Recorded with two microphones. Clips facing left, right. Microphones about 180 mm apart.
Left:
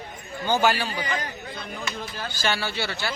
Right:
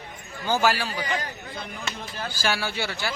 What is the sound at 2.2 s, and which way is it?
Speech, 10° right (ahead or behind).